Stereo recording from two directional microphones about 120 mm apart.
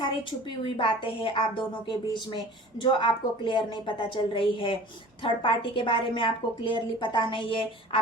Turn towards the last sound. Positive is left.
turn(degrees=45)  # may be behind; listen again after turning